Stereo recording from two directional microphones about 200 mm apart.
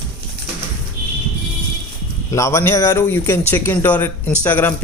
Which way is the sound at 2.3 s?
15° left (ahead or behind).